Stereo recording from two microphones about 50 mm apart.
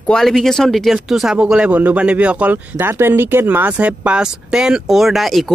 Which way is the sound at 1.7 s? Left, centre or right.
Right.